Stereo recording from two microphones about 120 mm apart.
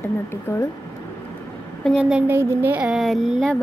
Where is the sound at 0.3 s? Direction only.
20° left (ahead or behind).